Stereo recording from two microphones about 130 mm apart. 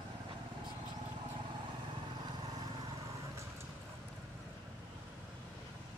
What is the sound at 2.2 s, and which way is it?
Vehicle, 30° right (ahead or behind).